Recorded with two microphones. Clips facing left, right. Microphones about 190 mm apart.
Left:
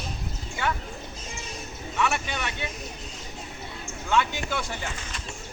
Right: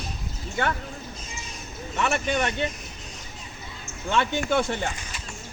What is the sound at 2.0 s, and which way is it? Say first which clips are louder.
Speech: right 3 dB; 50° right (ahead or behind).